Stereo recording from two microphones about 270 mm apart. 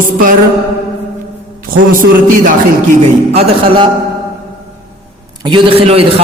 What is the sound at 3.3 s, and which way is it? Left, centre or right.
Speech, centre.